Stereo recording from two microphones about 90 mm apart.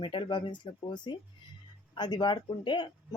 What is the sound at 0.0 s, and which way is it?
Speech, 70° left (ahead or behind).